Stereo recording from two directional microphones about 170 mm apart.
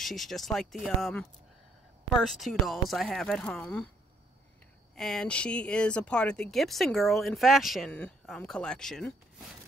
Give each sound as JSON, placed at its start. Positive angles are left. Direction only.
{"t": 0.0, "sound": "speech", "side_deg": 0}
{"t": 4.9, "sound": "speech", "side_deg": 5}